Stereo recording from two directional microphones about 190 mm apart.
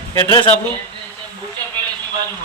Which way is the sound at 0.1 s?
20° left (ahead or behind).